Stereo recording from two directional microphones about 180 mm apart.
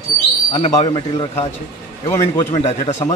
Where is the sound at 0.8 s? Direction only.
25° left (ahead or behind).